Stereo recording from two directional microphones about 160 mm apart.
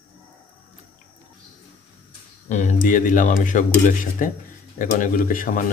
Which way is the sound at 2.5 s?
50° left (ahead or behind).